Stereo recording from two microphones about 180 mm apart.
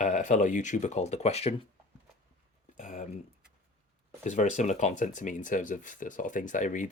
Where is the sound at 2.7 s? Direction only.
45° left (ahead or behind).